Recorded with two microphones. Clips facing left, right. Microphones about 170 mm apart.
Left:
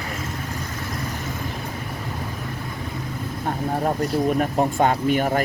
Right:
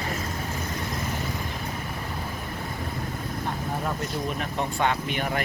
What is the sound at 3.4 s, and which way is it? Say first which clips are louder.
Speech: left 8 dB; 40° left (ahead or behind).